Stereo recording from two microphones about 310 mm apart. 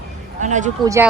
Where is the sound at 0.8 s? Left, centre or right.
Centre.